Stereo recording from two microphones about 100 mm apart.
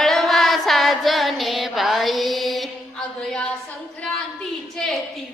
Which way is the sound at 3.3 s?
5° left (ahead or behind).